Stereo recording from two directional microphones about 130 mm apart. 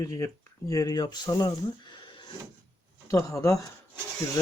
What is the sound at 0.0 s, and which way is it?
Speech, 25° left (ahead or behind).